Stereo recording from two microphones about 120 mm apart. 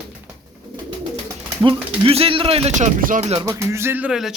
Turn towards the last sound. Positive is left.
turn(degrees=-5)  # may be behind; listen again after turning